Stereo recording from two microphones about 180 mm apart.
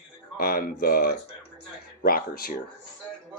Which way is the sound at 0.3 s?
55° left (ahead or behind).